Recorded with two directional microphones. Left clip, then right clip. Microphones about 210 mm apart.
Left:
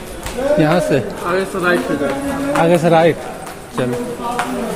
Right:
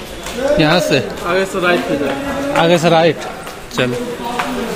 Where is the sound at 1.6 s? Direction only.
15° right (ahead or behind).